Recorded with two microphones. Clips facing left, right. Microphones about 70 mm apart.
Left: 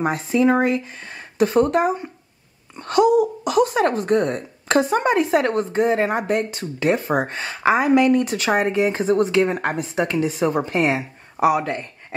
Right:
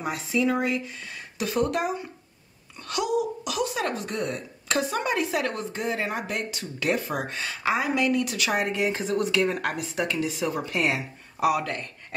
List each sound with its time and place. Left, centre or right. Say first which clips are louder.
0.0 s speech: left 7 dB; left